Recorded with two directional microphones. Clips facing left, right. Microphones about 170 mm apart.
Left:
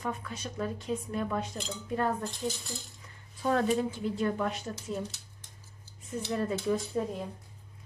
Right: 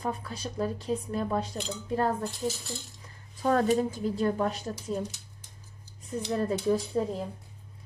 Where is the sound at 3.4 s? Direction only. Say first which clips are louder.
Right 3 dB; 40° right (ahead or behind).